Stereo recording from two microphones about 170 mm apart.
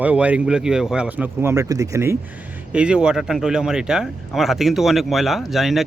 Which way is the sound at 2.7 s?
5° right (ahead or behind).